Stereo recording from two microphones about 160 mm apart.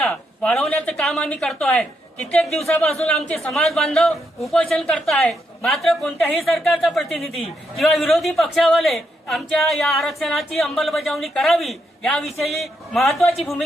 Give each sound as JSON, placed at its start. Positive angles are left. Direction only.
{"t": 0.1, "sound": "speech", "side_deg": 5}